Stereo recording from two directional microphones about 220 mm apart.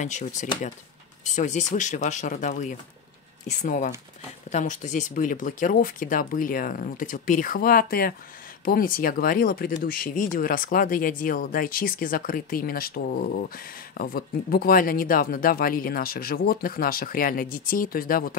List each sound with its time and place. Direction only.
0.0 s speech: 35° left (ahead or behind)